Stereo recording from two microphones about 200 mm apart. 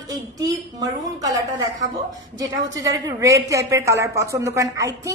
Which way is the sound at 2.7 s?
15° right (ahead or behind).